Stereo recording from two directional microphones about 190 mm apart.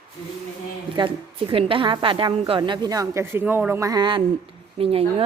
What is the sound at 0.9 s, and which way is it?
A woman's voice, 25° right (ahead or behind).